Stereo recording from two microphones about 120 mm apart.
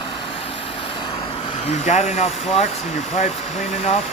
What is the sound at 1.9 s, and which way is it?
Speech, 65° left (ahead or behind).